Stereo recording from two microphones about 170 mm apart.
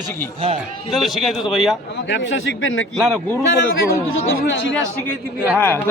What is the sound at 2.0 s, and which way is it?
Speech, 90° left.